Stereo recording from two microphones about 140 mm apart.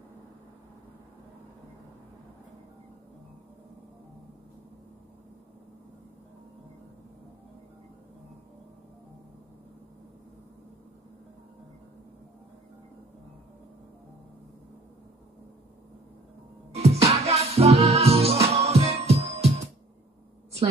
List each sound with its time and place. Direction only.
16.7 s music: 50° right (ahead or behind)